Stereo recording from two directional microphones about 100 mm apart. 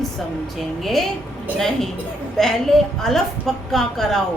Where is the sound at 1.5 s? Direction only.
5° left (ahead or behind).